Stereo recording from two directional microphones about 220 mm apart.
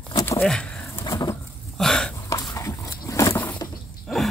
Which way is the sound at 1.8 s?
5° left (ahead or behind).